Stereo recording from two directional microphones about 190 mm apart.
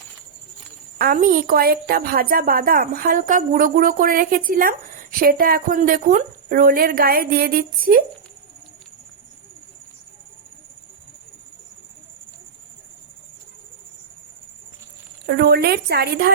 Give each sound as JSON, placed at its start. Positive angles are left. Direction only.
{"t": 0.9, "sound": "a woman's voice", "side_deg": -45}
{"t": 15.3, "sound": "a woman's voice", "side_deg": -55}